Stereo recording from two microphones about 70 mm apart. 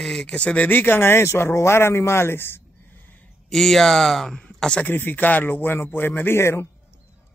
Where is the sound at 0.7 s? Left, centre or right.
Left.